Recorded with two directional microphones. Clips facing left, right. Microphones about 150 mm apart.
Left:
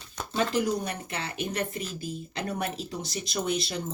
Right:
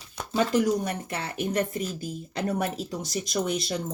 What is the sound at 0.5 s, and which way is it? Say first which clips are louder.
Speech: right 4 dB; 40° right (ahead or behind).